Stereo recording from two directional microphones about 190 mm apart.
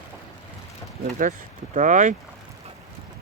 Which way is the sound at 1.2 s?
40° right (ahead or behind).